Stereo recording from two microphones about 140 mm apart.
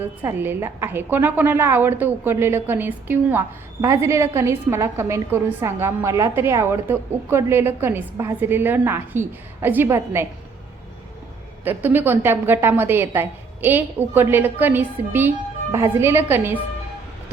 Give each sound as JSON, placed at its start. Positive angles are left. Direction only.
{"t": 0.2, "sound": "a woman's voice", "side_deg": -15}
{"t": 11.6, "sound": "a woman's voice", "side_deg": -15}